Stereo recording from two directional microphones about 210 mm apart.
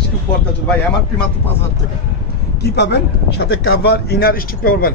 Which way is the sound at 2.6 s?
50° left (ahead or behind).